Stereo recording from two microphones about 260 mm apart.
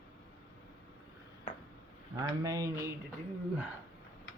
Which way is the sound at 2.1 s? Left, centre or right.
Centre.